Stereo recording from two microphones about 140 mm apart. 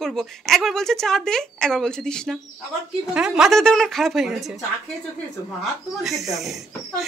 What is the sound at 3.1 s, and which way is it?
A woman's voice, 5° right (ahead or behind).